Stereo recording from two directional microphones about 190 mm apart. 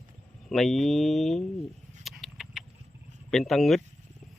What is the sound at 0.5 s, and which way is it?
Speech, centre (ahead or behind).